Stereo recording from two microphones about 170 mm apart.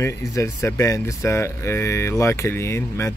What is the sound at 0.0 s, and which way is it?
Speech, 20° left (ahead or behind).